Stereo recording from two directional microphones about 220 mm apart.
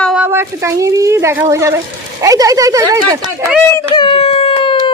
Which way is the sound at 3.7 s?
20° left (ahead or behind).